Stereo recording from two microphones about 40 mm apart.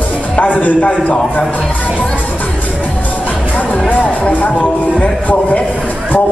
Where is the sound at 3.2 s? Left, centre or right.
Left.